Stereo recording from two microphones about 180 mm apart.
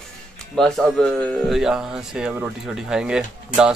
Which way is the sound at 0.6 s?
Centre (ahead or behind).